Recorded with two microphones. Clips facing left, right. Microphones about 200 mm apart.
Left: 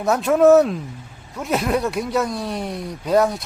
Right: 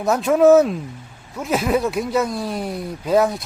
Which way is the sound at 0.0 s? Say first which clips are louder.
Even; centre (ahead or behind).